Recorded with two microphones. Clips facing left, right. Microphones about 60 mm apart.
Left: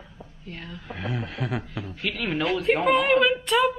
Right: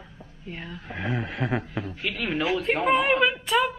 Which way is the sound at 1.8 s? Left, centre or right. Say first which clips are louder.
Even; centre.